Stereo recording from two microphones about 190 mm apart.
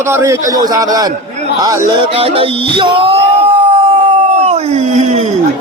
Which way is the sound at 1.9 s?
25° right (ahead or behind).